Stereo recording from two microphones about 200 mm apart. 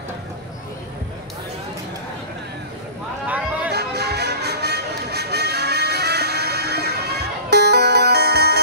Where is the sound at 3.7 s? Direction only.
55° right (ahead or behind).